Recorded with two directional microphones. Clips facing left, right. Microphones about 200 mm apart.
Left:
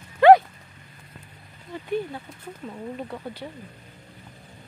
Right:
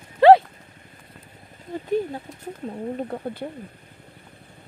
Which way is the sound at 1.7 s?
40° right (ahead or behind).